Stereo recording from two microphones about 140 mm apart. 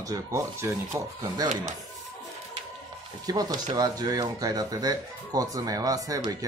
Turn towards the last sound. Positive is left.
turn(degrees=-25)  # may be behind; listen again after turning